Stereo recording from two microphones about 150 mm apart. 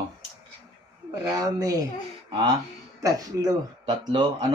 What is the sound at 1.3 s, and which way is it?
Speech, 25° right (ahead or behind).